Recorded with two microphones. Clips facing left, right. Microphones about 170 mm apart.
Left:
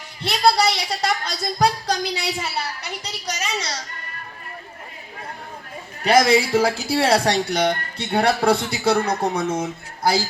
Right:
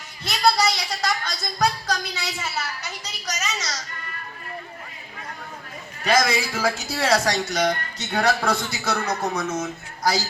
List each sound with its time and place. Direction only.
0.2 s speech: 30° left (ahead or behind)
6.0 s a man's voice: 30° left (ahead or behind)